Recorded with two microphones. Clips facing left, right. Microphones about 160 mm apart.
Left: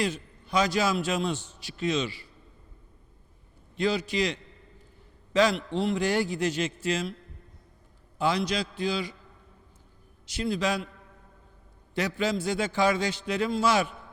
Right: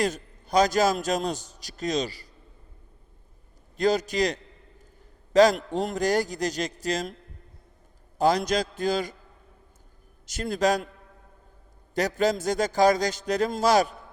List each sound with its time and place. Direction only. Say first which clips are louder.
0.0 s a man's voice: right 3 dB; 40° right (ahead or behind)
3.8 s a man's voice: right 3 dB; 40° right (ahead or behind)
8.2 s a man's voice: right 4 dB; 40° right (ahead or behind)
10.2 s a man's voice: right 4 dB; 45° right (ahead or behind)
11.9 s a man's voice: right 4 dB; 40° right (ahead or behind)